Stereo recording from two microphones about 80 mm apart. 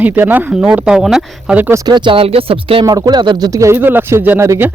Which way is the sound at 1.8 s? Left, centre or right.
Right.